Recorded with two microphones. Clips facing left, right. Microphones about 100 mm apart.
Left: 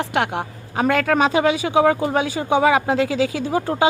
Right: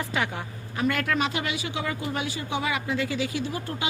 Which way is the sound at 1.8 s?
90° left.